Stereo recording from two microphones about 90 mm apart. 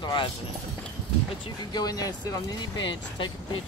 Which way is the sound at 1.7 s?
45° left (ahead or behind).